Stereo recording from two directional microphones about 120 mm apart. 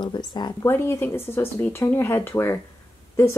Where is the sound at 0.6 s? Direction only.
20° left (ahead or behind).